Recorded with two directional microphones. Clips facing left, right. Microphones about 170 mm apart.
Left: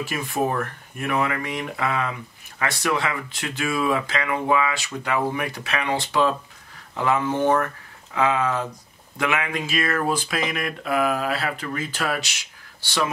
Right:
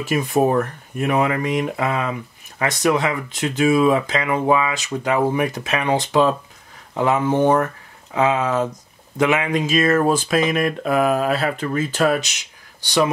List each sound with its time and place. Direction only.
0.0 s speech: 20° right (ahead or behind)
10.0 s a sound: 45° right (ahead or behind)
10.4 s mantra: 35° right (ahead or behind)
11.5 s speech: 25° right (ahead or behind)